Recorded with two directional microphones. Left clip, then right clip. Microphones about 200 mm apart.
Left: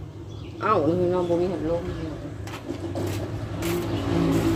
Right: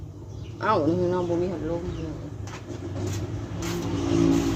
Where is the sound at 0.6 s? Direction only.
Centre (ahead or behind).